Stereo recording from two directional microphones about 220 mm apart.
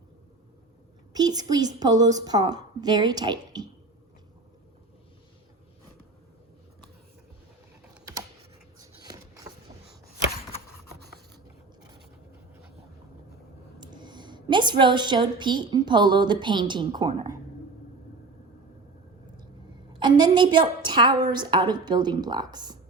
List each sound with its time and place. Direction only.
1.1 s a woman's voice: 20° right (ahead or behind)
8.8 s a sound: 15° right (ahead or behind)
13.7 s a woman's voice: 20° right (ahead or behind)
19.9 s a woman's voice: 20° right (ahead or behind)